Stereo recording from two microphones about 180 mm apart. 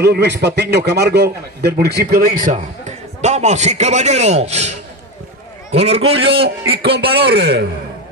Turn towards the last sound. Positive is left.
turn(degrees=-70)  # may be behind; listen again after turning